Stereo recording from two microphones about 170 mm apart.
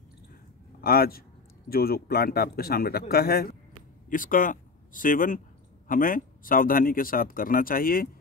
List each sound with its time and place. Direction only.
0.7 s a man's voice: 60° left (ahead or behind)
4.1 s speech: 55° left (ahead or behind)